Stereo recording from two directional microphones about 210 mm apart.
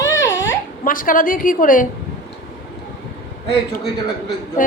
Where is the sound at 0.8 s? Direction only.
40° left (ahead or behind).